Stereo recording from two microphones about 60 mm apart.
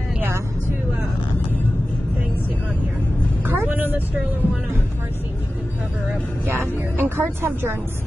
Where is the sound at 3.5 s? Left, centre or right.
Right.